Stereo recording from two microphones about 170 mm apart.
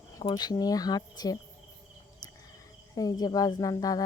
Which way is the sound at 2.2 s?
25° left (ahead or behind).